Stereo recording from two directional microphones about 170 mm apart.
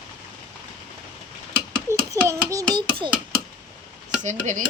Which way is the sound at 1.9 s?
15° right (ahead or behind).